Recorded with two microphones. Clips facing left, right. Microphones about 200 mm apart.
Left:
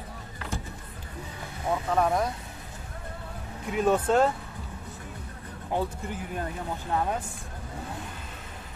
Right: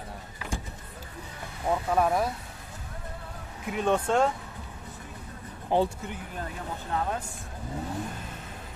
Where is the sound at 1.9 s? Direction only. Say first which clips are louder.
Even; 5° right (ahead or behind).